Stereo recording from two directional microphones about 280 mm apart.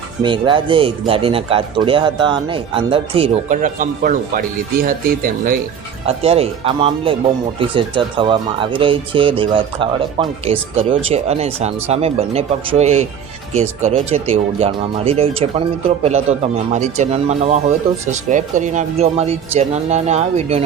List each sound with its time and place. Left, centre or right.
0.2 s speech: centre